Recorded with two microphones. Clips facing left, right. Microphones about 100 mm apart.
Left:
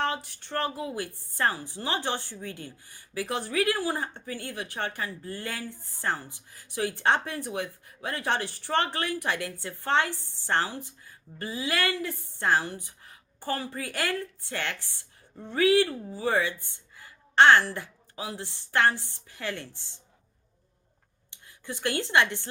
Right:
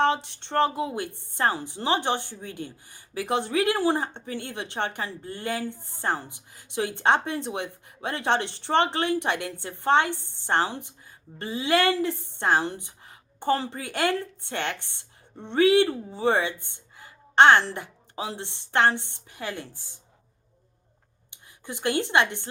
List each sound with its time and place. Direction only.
0.0 s a woman's voice: 25° right (ahead or behind)
21.2 s speech: 20° right (ahead or behind)